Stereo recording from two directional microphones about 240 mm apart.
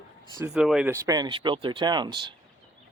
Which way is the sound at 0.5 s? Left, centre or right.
Centre.